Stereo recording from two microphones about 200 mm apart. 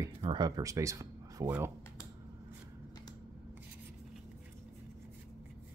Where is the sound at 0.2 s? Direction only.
25° right (ahead or behind).